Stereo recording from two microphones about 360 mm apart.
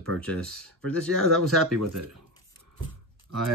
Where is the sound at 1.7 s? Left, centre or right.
Right.